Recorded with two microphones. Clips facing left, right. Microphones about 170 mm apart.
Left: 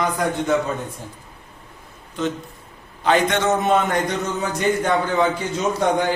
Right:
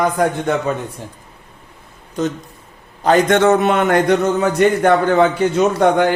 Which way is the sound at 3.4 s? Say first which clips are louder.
Right 5 dB; 65° right (ahead or behind).